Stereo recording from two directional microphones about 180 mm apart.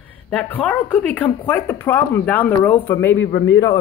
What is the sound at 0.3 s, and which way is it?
Speech, 5° left (ahead or behind).